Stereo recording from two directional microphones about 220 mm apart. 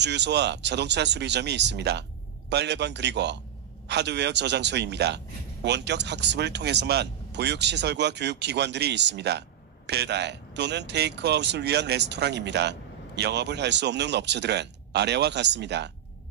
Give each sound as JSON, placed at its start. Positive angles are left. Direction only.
{"t": 0.0, "sound": "speech", "side_deg": -50}